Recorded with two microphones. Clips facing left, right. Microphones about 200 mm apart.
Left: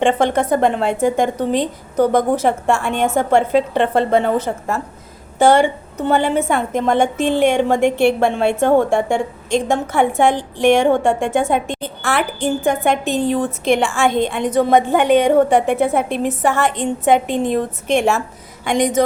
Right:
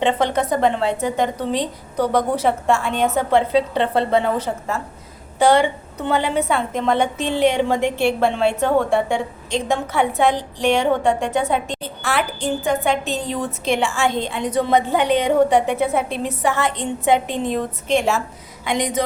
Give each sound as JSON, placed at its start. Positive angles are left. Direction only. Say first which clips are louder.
{"t": 0.0, "sound": "a woman's voice", "louder": "left 3 dB", "side_deg": 50}